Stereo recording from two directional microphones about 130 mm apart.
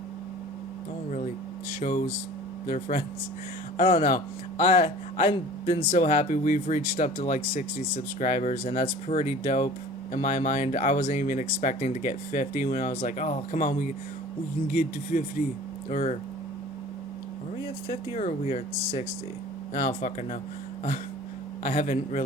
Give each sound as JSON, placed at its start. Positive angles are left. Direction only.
{"t": 1.8, "sound": "speech", "side_deg": 70}
{"t": 2.6, "sound": "speech", "side_deg": 85}
{"t": 3.8, "sound": "speech", "side_deg": 70}
{"t": 6.9, "sound": "speech", "side_deg": 65}
{"t": 8.6, "sound": "speech", "side_deg": 60}
{"t": 10.1, "sound": "speech", "side_deg": 70}
{"t": 15.9, "sound": "speech", "side_deg": 65}
{"t": 18.1, "sound": "speech", "side_deg": 70}
{"t": 20.0, "sound": "speech", "side_deg": 90}
{"t": 21.6, "sound": "speech", "side_deg": 70}